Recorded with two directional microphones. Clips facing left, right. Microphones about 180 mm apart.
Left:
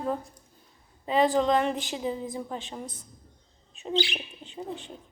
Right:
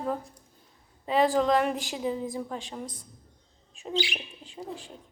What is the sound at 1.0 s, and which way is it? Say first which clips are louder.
A woman's voice: even; centre (ahead or behind).